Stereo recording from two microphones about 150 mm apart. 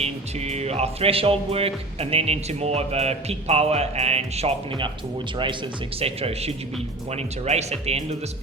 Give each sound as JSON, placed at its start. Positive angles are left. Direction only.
{"t": 0.0, "sound": "speech", "side_deg": -45}
{"t": 6.0, "sound": "speech", "side_deg": -40}